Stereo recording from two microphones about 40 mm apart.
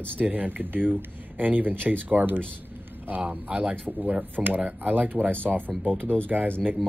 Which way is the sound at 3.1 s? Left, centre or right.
Right.